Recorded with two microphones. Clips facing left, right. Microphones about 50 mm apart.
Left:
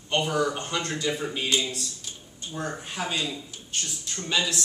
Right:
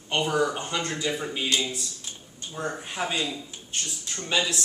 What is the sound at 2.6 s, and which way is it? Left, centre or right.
Speech, centre.